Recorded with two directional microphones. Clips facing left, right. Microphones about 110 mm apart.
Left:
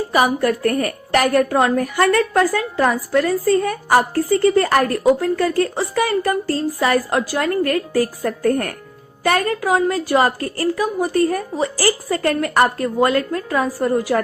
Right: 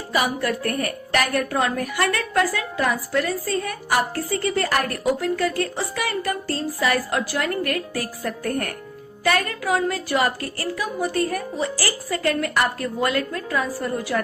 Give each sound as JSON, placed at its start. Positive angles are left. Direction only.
{"t": 0.2, "sound": "a woman's voice", "side_deg": 40}
{"t": 9.2, "sound": "a woman's voice", "side_deg": 30}